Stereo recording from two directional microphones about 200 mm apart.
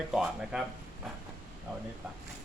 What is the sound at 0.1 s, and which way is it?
Speech, centre (ahead or behind).